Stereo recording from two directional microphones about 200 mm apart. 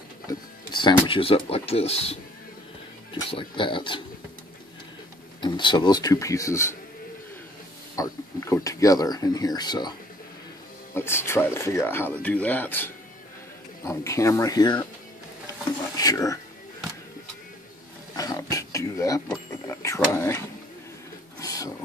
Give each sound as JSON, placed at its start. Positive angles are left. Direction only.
{"t": 0.3, "sound": "speech", "side_deg": 20}
{"t": 5.4, "sound": "speech", "side_deg": 25}
{"t": 7.9, "sound": "speech", "side_deg": 15}
{"t": 11.0, "sound": "speech", "side_deg": 10}
{"t": 16.0, "sound": "speech", "side_deg": 15}
{"t": 18.1, "sound": "a sound", "side_deg": 15}